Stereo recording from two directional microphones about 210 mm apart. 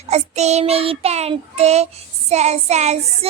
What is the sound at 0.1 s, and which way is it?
Child singing, 30° right (ahead or behind).